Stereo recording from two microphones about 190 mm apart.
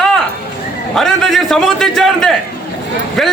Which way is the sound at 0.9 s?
Centre (ahead or behind).